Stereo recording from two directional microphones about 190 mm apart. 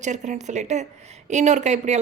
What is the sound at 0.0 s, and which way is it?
Speech, 40° right (ahead or behind).